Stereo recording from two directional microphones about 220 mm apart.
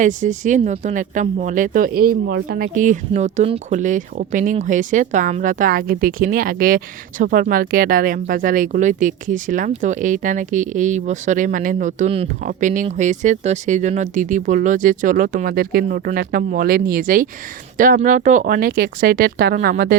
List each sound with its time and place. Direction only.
0.0 s speech: 35° right (ahead or behind)